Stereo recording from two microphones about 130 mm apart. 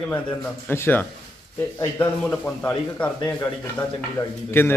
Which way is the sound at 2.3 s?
5° left (ahead or behind).